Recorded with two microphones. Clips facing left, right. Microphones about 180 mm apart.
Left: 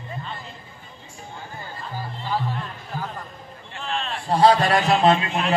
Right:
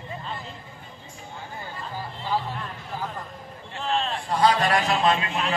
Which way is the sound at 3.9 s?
35° right (ahead or behind).